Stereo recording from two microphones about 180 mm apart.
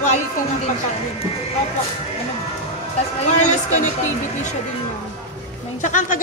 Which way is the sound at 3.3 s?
40° left (ahead or behind).